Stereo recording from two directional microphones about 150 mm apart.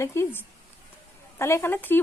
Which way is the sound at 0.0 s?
15° left (ahead or behind).